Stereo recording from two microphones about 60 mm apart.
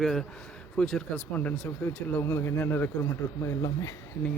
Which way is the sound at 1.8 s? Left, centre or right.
Left.